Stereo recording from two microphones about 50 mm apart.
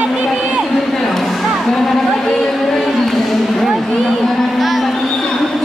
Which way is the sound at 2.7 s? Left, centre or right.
Centre.